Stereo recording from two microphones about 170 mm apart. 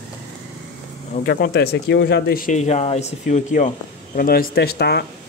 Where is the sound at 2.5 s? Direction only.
40° left (ahead or behind).